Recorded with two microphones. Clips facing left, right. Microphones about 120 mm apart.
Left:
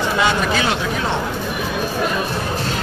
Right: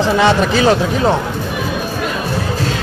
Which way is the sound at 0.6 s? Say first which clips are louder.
Right 7 dB; 35° right (ahead or behind).